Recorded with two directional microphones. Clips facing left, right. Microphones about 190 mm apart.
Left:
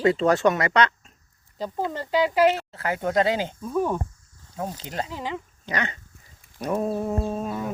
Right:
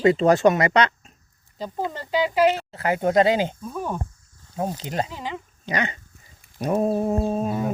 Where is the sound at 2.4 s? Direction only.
15° right (ahead or behind).